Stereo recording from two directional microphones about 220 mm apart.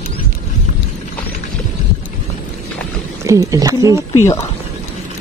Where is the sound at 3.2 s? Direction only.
15° right (ahead or behind).